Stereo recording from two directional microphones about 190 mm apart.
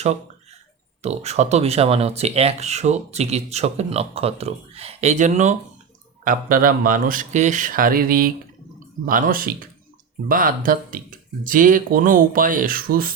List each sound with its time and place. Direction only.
1.0 s speech: 35° right (ahead or behind)